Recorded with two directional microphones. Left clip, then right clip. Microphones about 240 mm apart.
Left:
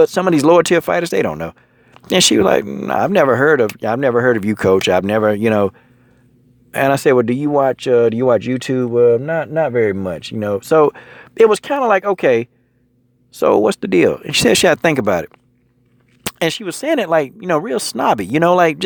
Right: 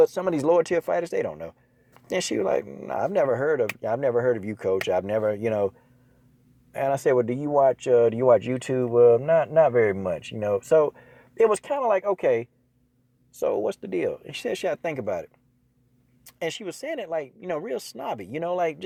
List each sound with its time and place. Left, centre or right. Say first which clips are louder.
0.0 s speech: left 9 dB; left
16.4 s speech: left 11 dB; left